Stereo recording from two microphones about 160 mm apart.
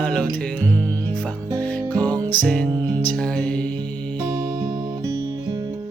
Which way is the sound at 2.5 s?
5° left (ahead or behind).